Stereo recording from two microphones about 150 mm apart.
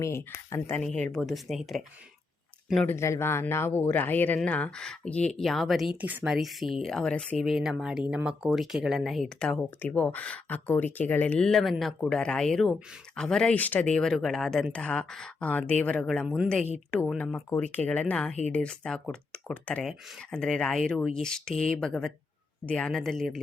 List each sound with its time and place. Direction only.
0.0 s speech: 20° left (ahead or behind)
0.8 s speech: 5° left (ahead or behind)
2.8 s speech: 20° left (ahead or behind); by 23.4 s centre (ahead or behind)